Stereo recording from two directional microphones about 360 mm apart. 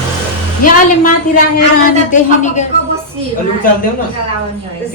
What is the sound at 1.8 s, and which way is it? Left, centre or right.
Speech, centre.